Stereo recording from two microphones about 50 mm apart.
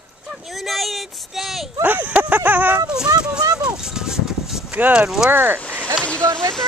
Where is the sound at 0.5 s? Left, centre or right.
Centre.